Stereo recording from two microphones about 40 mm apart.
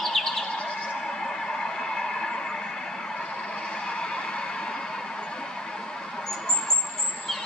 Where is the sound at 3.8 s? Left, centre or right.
Centre.